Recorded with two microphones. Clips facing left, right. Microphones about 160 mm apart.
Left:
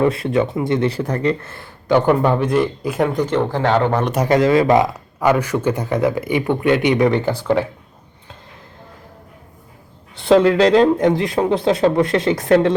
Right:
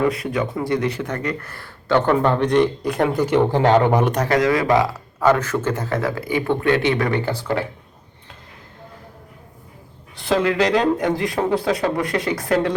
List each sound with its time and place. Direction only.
0.0 s speech: 25° left (ahead or behind); by 3.2 s centre (ahead or behind)
3.2 s speech: 15° right (ahead or behind)
4.3 s speech: 25° left (ahead or behind)
10.2 s speech: 25° left (ahead or behind)